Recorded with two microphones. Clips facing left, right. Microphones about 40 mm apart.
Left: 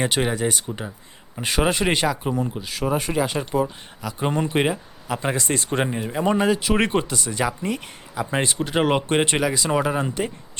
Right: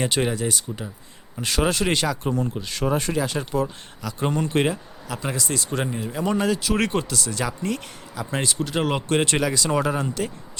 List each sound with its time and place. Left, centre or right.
0.0 s speech: centre
5.4 s speech: left; by 10.3 s centre